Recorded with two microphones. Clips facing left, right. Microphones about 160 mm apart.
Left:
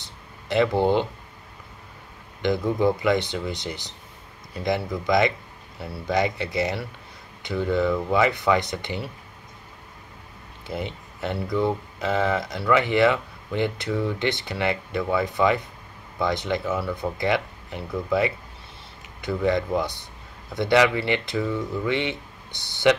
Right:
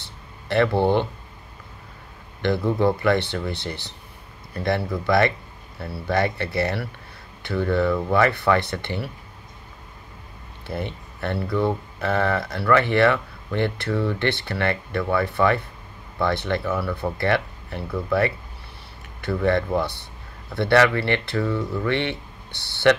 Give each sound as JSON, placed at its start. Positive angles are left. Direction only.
{"t": 0.0, "sound": "a sound", "side_deg": 15}
{"t": 2.4, "sound": "speech", "side_deg": 15}
{"t": 10.7, "sound": "speech", "side_deg": 15}